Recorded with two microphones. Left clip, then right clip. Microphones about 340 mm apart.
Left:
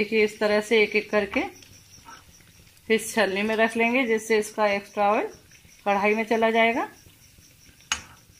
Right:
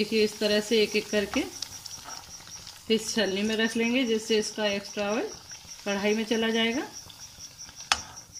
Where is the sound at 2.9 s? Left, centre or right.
Centre.